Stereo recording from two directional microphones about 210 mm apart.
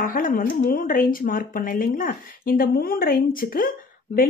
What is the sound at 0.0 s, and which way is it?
Speech, 40° left (ahead or behind).